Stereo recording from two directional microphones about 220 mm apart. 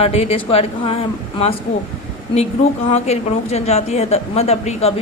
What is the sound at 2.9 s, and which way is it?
Speech, 30° left (ahead or behind).